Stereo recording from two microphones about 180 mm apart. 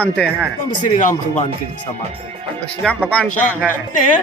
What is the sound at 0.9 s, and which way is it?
Speech, 45° left (ahead or behind).